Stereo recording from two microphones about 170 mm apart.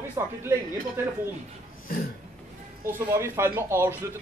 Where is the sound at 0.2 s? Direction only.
15° right (ahead or behind).